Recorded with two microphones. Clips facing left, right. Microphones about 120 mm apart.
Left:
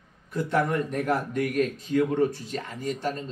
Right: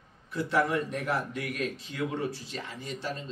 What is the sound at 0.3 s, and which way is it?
A man's voice, 50° left (ahead or behind).